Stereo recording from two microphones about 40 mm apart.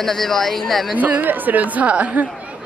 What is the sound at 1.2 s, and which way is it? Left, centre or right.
Speech, right.